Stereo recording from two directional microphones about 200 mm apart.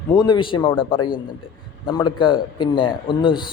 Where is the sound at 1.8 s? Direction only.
20° left (ahead or behind).